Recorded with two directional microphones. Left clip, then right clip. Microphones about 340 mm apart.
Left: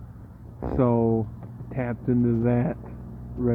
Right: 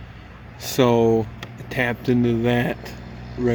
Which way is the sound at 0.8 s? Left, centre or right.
Centre.